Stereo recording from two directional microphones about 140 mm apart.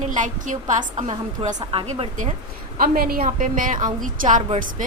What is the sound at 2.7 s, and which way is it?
A woman's voice, 90° right.